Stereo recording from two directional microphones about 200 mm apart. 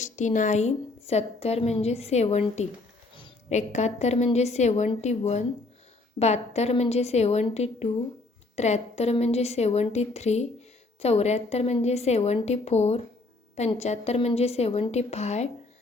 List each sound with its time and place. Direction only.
0.0 s a woman's voice: 35° left (ahead or behind)
3.5 s a woman's voice: 35° left (ahead or behind)